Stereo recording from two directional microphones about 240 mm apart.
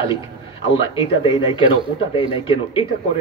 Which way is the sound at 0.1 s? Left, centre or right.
Left.